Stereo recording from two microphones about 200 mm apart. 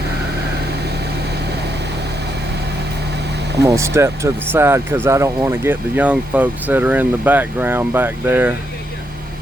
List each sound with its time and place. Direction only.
3.6 s speech: 15° right (ahead or behind)